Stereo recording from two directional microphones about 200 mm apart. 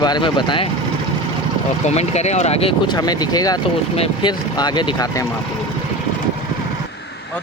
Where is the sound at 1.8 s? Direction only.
35° left (ahead or behind).